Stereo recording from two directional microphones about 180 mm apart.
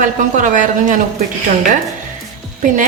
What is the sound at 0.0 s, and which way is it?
A woman's voice, 45° right (ahead or behind).